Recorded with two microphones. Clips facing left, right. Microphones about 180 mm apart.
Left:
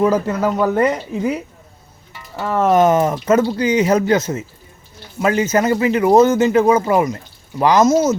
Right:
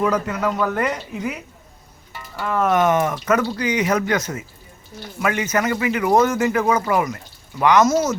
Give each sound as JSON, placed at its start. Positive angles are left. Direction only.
{"t": 0.0, "sound": "speech", "side_deg": 30}
{"t": 2.4, "sound": "speech", "side_deg": 30}
{"t": 7.9, "sound": "speech", "side_deg": 20}